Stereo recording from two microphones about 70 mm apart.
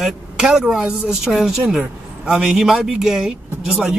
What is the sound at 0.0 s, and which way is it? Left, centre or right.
A woman's voice, centre.